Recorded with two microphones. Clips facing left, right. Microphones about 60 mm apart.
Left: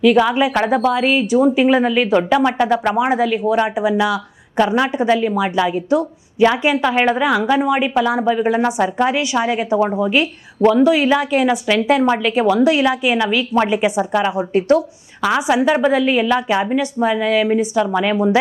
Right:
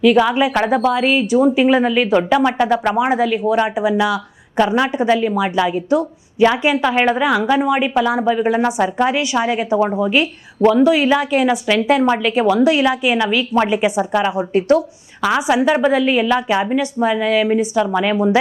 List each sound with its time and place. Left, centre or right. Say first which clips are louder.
0.0 s a woman's voice: even; right